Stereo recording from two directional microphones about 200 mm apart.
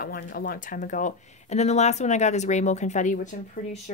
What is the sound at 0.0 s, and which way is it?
Speech, 45° left (ahead or behind).